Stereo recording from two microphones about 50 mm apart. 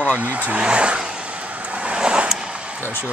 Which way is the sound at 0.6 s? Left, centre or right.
Right.